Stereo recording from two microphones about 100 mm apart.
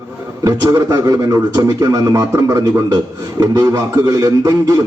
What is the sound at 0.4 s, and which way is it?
A man's voice, 35° right (ahead or behind).